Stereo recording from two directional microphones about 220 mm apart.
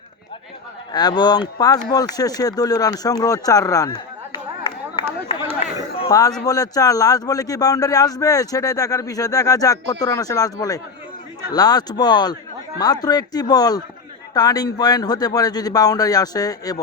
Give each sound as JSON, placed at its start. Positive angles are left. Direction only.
{"t": 0.9, "sound": "a man's voice", "side_deg": 20}
{"t": 6.0, "sound": "a man's voice", "side_deg": 15}